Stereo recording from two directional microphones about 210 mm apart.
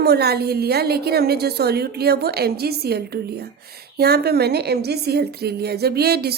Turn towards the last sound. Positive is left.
turn(degrees=-50)  # may be behind; listen again after turning